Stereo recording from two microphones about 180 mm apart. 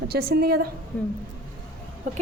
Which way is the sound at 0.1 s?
60° right (ahead or behind).